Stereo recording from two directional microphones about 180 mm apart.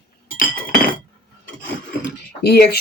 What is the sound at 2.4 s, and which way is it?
Speech, 65° left (ahead or behind).